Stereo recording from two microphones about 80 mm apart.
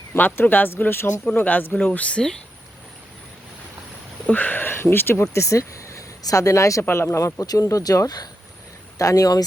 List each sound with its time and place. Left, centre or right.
0.1 s speech: left
1.2 s speech: centre
4.3 s speech: left
6.8 s speech: left